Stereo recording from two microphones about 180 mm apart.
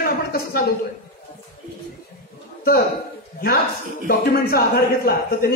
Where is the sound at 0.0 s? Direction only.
55° left (ahead or behind).